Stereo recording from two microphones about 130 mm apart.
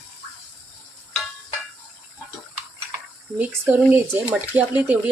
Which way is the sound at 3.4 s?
10° right (ahead or behind).